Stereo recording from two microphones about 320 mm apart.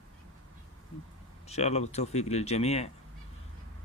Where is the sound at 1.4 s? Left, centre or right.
Centre.